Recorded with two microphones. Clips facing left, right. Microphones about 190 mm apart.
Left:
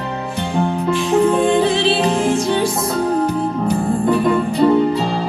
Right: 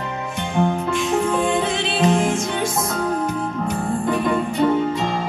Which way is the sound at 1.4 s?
35° left (ahead or behind).